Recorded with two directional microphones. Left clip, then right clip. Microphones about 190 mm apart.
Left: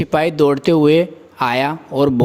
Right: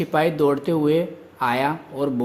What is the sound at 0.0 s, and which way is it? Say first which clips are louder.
Speech: left 5 dB; 40° left (ahead or behind).